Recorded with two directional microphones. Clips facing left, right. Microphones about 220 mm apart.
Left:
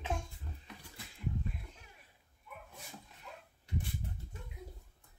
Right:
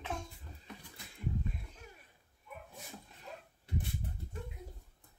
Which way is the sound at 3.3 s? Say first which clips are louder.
Right 3 dB; 35° right (ahead or behind).